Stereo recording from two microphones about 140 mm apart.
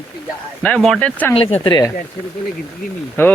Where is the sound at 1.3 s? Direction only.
40° left (ahead or behind).